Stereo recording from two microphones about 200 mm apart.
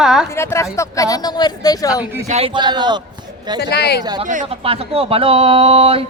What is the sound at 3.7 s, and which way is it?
Speech, 55° left (ahead or behind).